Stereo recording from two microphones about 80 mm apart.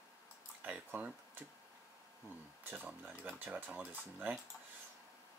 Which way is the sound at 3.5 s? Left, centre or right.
Right.